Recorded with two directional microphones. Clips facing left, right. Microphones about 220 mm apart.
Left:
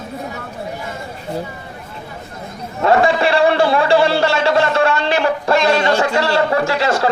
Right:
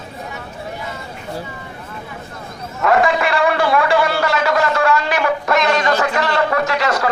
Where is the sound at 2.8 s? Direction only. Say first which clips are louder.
Left 2 dB; 30° left (ahead or behind).